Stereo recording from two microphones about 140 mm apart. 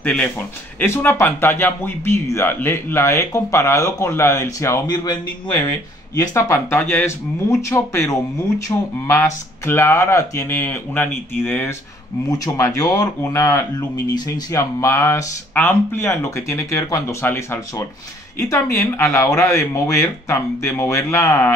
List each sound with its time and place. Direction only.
0.0 s speech: 10° left (ahead or behind)